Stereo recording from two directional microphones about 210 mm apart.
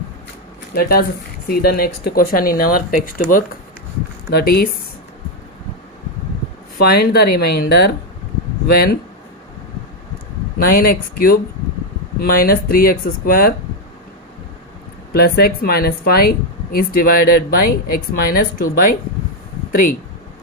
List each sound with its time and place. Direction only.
0.7 s speech: 45° left (ahead or behind)
6.7 s speech: 45° left (ahead or behind)
10.6 s speech: 45° left (ahead or behind)
15.1 s speech: 45° left (ahead or behind)